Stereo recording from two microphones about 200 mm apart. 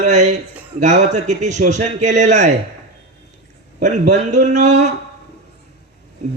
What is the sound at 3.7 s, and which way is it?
Speech, 35° right (ahead or behind).